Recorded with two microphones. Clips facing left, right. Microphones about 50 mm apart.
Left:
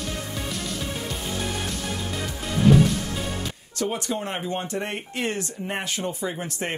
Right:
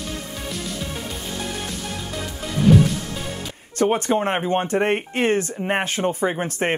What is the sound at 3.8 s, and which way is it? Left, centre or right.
Speech, right.